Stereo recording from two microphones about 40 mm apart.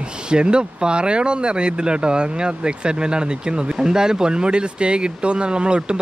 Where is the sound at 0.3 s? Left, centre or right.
Right.